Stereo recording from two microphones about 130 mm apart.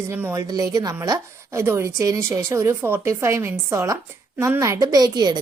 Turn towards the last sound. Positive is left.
turn(degrees=-30)  # may be behind; listen again after turning